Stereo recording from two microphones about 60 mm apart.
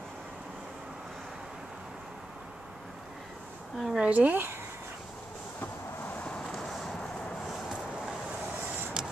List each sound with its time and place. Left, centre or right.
3.7 s a woman's voice: centre
4.0 s speech: right
6.1 s vehicle: centre
9.0 s a sound: centre